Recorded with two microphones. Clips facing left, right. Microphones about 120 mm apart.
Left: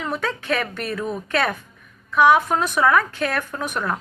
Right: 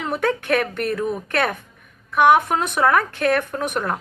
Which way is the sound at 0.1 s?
60° right (ahead or behind).